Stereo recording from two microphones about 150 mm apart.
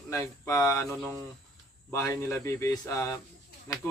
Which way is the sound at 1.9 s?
20° left (ahead or behind).